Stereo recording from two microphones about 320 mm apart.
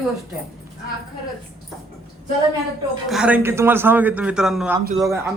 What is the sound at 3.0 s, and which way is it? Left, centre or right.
A man's voice, centre.